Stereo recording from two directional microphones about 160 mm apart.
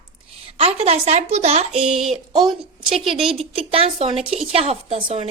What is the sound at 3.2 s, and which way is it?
A woman's voice, 35° right (ahead or behind).